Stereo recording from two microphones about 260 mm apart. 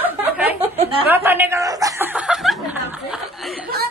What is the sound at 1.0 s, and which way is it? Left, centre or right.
Chuckle, centre.